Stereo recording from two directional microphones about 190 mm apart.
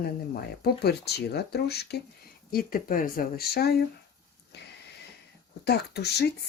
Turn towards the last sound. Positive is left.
turn(degrees=60)  # may be behind; listen again after turning